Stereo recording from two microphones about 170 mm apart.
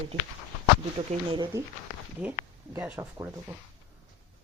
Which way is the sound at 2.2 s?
10° right (ahead or behind).